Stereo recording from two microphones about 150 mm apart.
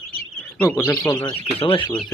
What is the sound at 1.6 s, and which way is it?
Speech, 35° left (ahead or behind).